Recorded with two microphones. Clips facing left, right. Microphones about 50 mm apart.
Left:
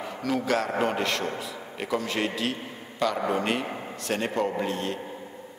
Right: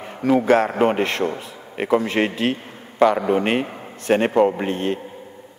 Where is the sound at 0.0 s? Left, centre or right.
Right.